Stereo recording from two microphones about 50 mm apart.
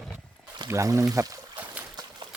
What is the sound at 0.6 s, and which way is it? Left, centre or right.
Speech, right.